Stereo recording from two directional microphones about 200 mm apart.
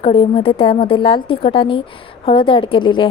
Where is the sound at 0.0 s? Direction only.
30° left (ahead or behind).